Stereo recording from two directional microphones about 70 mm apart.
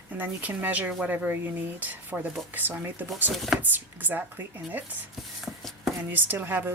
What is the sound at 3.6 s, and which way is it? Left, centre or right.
Speech, right.